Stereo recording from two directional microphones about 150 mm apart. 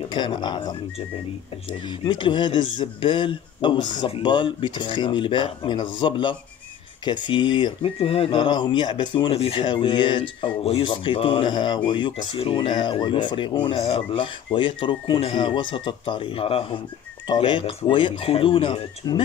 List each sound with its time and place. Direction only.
0.1 s speech: 30° left (ahead or behind)